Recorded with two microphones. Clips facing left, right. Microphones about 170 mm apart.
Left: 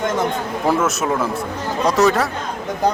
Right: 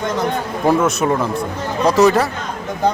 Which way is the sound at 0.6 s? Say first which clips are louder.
Right 3 dB; centre (ahead or behind).